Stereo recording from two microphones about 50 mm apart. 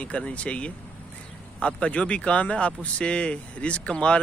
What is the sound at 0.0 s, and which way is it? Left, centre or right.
Speech, left.